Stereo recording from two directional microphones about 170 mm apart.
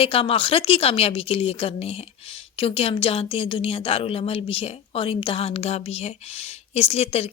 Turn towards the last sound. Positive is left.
turn(degrees=35)  # may be behind; listen again after turning